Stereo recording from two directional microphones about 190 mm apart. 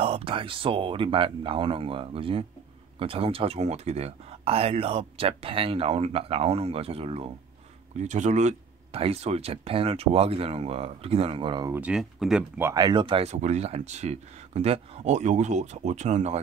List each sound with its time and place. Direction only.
0.0 s speech: 30° right (ahead or behind)
11.7 s speech: 5° right (ahead or behind); by 16.3 s 35° right (ahead or behind)